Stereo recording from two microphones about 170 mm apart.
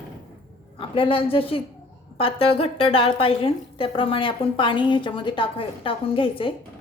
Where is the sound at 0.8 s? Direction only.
30° left (ahead or behind).